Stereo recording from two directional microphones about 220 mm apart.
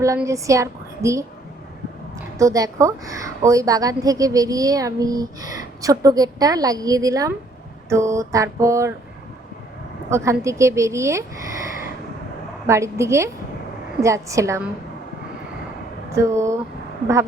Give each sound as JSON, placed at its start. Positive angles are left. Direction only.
{"t": 0.0, "sound": "a woman's voice", "side_deg": -15}
{"t": 2.4, "sound": "a woman's voice", "side_deg": -15}
{"t": 10.1, "sound": "a woman's voice", "side_deg": -15}
{"t": 12.6, "sound": "a woman's voice", "side_deg": -15}
{"t": 16.1, "sound": "a woman's voice", "side_deg": -15}